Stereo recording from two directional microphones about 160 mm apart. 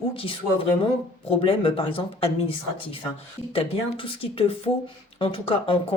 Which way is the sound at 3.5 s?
35° left (ahead or behind).